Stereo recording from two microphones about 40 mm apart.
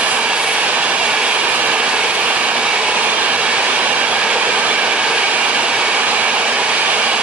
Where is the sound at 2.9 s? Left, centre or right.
Right.